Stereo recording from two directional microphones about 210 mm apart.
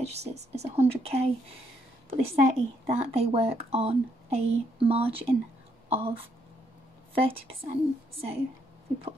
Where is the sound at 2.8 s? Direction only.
30° right (ahead or behind).